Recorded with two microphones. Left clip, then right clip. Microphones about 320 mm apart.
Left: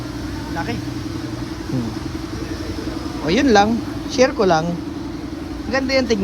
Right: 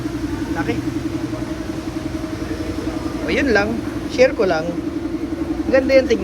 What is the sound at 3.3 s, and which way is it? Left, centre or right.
Speech, centre.